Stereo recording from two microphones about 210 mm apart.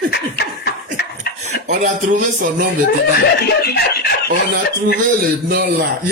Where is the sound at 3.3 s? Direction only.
50° left (ahead or behind).